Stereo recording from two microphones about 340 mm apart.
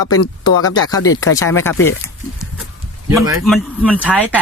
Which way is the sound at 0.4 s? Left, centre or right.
Centre.